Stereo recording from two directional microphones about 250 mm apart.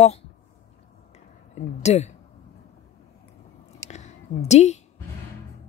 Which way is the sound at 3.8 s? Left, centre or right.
Left.